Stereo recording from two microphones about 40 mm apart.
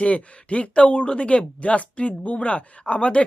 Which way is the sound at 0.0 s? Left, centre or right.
Left.